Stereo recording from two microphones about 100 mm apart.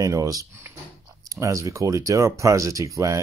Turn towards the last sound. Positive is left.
turn(degrees=-30)  # may be behind; listen again after turning